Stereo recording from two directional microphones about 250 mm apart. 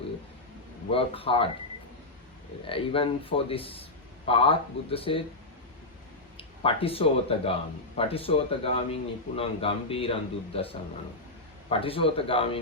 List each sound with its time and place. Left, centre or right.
0.9 s a man's voice: left
2.6 s a man's voice: left
6.3 s a man's voice: left
11.7 s a man's voice: left